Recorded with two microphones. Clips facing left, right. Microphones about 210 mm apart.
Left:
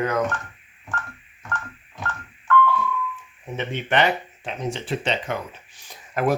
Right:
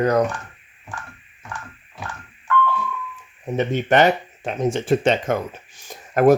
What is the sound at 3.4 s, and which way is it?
Speech, 40° right (ahead or behind).